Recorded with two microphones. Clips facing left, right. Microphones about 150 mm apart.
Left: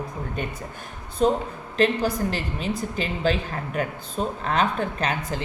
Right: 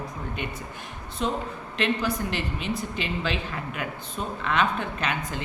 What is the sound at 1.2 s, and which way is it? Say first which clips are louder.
Speech: left 7 dB; 40° left (ahead or behind).